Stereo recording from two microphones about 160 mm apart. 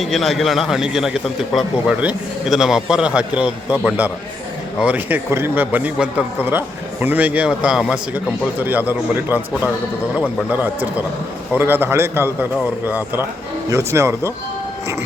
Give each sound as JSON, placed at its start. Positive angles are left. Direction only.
{"t": 0.0, "sound": "a man's voice", "side_deg": 0}
{"t": 10.5, "sound": "speech", "side_deg": -10}